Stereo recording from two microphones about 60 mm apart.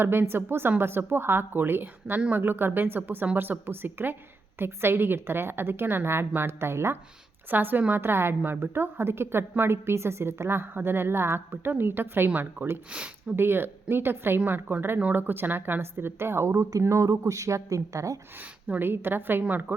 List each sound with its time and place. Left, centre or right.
0.0 s a woman's voice: right
7.5 s a woman's voice: right
17.1 s speech: right
18.8 s a woman's voice: right